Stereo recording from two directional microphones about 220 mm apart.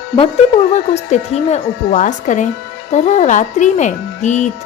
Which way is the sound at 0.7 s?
30° left (ahead or behind).